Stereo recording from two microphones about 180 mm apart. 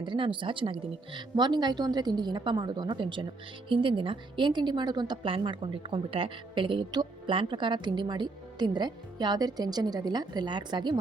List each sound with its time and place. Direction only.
0.0 s a woman's voice: 25° right (ahead or behind)